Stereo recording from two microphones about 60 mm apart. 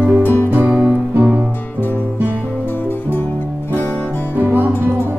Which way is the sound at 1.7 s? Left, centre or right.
Left.